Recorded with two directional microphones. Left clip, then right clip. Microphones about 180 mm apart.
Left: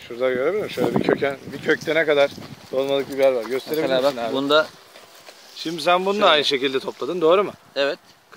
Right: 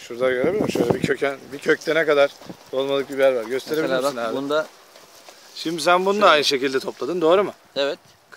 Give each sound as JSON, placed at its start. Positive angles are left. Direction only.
{"t": 0.0, "sound": "speech", "side_deg": -10}
{"t": 4.4, "sound": "speech", "side_deg": 20}
{"t": 5.6, "sound": "speech", "side_deg": -15}
{"t": 7.7, "sound": "speech", "side_deg": 5}